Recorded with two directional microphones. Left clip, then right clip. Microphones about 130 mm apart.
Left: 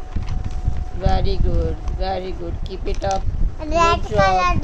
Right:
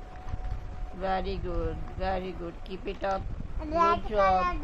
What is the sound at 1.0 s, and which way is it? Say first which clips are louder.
Speech: left 7 dB; 5° right (ahead or behind).